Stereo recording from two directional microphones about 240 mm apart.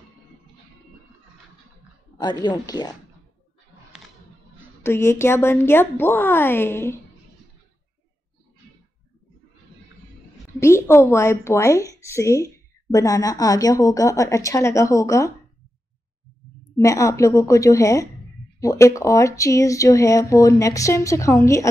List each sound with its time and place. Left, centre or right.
2.1 s speech: centre
4.8 s speech: centre
10.6 s speech: centre
16.6 s speech: centre